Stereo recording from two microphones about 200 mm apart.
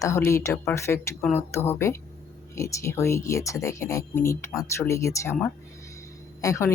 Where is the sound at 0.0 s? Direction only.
15° left (ahead or behind).